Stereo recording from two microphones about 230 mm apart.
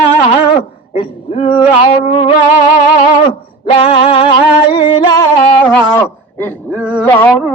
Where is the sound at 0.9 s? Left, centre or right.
Left.